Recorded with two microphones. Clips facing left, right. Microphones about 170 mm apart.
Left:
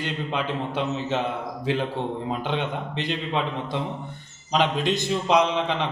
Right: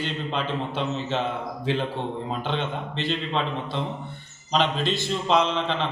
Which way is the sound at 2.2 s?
15° left (ahead or behind).